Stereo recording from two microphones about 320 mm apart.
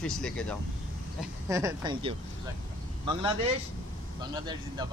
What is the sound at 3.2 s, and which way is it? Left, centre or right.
Speech, centre.